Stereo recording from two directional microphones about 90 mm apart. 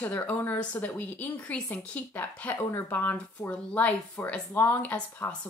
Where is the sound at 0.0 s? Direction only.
20° left (ahead or behind).